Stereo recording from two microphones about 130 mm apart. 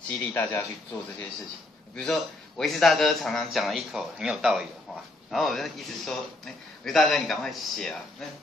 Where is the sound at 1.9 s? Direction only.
5° left (ahead or behind).